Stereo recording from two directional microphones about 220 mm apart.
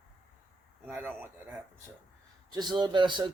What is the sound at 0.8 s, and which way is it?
Speech, 10° right (ahead or behind).